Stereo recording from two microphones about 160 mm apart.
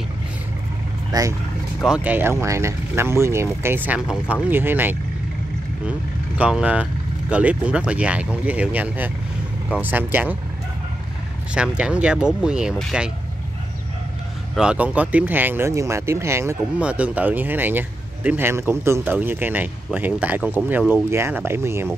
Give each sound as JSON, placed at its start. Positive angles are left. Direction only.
{"t": 1.1, "sound": "speech", "side_deg": -25}
{"t": 1.8, "sound": "speech", "side_deg": -5}
{"t": 11.5, "sound": "speech", "side_deg": -5}
{"t": 14.5, "sound": "speech", "side_deg": -5}